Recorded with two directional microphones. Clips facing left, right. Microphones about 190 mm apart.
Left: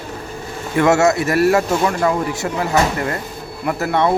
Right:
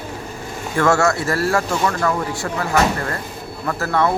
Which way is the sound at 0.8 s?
20° left (ahead or behind).